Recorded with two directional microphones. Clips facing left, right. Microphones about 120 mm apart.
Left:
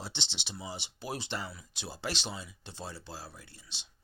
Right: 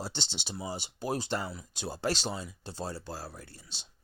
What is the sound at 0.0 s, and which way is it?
Speech, 40° right (ahead or behind).